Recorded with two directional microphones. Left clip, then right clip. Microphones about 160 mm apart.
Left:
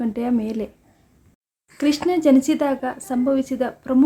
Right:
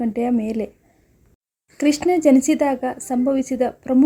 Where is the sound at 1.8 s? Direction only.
20° right (ahead or behind).